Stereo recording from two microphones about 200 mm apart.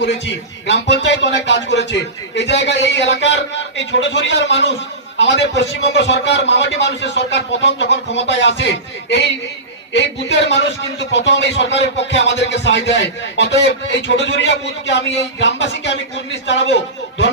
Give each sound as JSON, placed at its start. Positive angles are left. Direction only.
{"t": 0.0, "sound": "a man's voice", "side_deg": 60}